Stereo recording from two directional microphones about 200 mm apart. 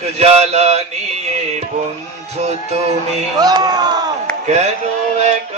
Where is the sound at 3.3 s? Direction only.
20° right (ahead or behind).